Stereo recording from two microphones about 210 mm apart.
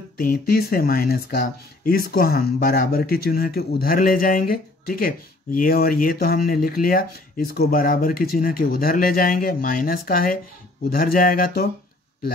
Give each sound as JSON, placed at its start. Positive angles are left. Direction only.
{"t": 0.2, "sound": "speech", "side_deg": 45}